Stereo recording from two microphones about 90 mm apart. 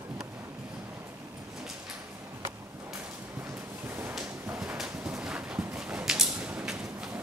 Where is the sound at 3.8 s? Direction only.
25° right (ahead or behind).